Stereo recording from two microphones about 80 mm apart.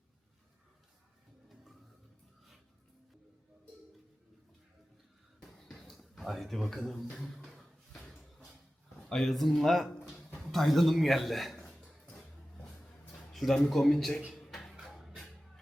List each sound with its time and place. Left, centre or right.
5.4 s music: centre
5.8 s speech: centre
9.0 s speech: centre
12.1 s music: centre
13.3 s speech: centre
14.3 s a sound: centre
14.9 s music: centre